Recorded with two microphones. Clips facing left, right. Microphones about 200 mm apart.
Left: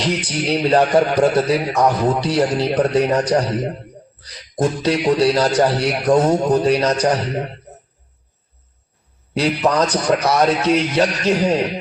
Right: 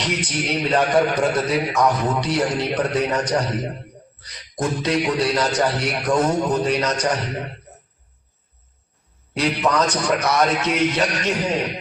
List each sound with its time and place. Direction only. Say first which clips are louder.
0.0 s a man's voice: left 4 dB; 35° left (ahead or behind)
9.3 s a man's voice: left 3 dB; 35° left (ahead or behind)